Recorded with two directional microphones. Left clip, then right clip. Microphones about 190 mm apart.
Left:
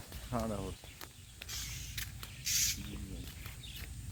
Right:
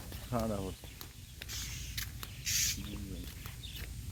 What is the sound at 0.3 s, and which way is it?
Speech, 35° right (ahead or behind).